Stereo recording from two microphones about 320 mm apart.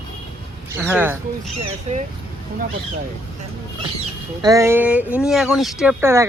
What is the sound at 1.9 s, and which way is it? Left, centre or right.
Speech, right.